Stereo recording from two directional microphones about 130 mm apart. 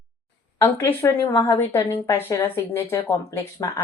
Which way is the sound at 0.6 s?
20° left (ahead or behind).